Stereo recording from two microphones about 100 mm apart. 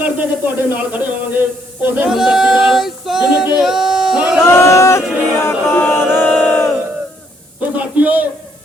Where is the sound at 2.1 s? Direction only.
5° right (ahead or behind).